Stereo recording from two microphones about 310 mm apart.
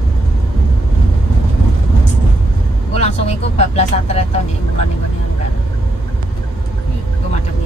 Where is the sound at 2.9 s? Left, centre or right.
Left.